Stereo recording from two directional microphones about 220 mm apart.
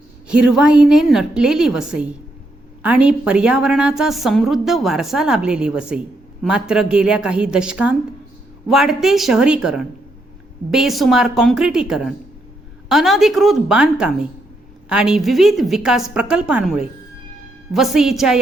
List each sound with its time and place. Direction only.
0.3 s a woman's voice: 5° right (ahead or behind)